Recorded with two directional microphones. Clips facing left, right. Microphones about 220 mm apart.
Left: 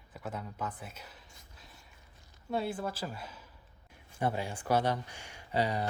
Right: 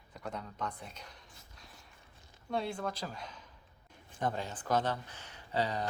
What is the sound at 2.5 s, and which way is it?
Speech, 5° left (ahead or behind).